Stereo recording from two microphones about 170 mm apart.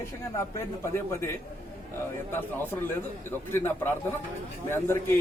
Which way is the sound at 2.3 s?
15° left (ahead or behind).